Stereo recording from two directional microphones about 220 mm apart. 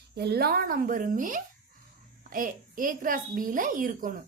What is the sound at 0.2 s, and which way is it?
A child's voice, 45° right (ahead or behind).